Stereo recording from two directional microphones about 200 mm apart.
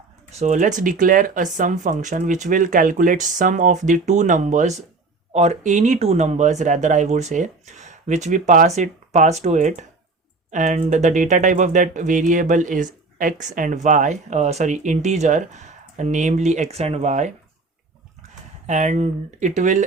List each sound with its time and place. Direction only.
0.3 s speech: 35° right (ahead or behind)